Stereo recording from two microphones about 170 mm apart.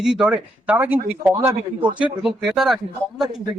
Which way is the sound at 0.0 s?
5° right (ahead or behind).